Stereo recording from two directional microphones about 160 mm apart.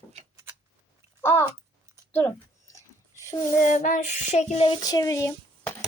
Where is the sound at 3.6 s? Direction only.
50° left (ahead or behind).